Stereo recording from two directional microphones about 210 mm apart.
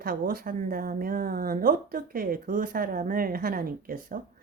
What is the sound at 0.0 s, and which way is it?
Speech, 45° right (ahead or behind).